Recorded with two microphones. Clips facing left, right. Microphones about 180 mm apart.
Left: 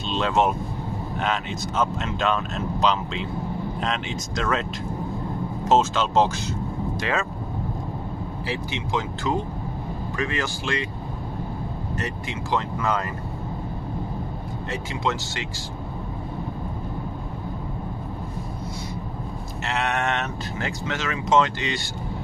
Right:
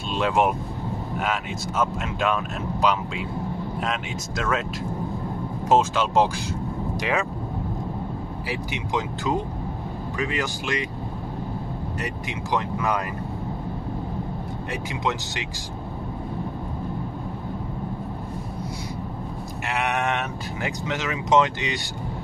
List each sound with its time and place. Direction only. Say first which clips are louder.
0.1 s speech: even; 10° right (ahead or behind)
5.7 s speech: even; 10° right (ahead or behind)
8.5 s speech: left 1 dB; 15° right (ahead or behind)
12.0 s speech: left 2 dB; 15° right (ahead or behind)
14.7 s speech: left 1 dB; 15° right (ahead or behind)
19.6 s speech: even; 15° right (ahead or behind)